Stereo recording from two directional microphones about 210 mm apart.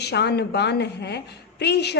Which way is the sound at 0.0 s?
50° left (ahead or behind).